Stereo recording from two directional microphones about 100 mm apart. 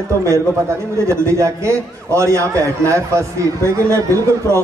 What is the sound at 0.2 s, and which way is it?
A man's voice, 30° right (ahead or behind).